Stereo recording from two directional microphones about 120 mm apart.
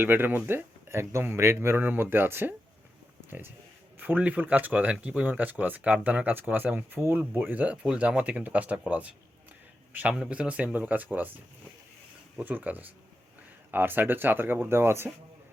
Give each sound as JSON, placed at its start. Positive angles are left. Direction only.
{"t": 0.0, "sound": "speech", "side_deg": -15}
{"t": 12.4, "sound": "speech", "side_deg": -15}